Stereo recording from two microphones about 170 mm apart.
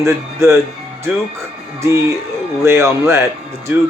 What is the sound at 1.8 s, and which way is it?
Speech, 15° right (ahead or behind).